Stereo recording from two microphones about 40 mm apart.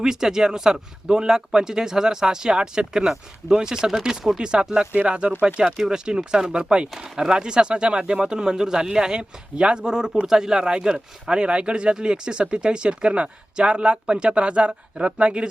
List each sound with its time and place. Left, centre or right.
0.0 s speech: centre